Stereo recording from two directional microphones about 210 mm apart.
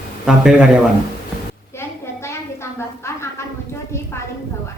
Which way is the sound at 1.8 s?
10° left (ahead or behind).